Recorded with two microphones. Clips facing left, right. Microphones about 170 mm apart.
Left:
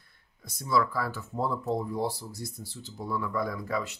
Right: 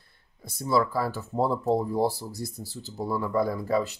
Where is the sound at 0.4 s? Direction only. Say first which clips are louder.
Right 3 dB; 30° right (ahead or behind).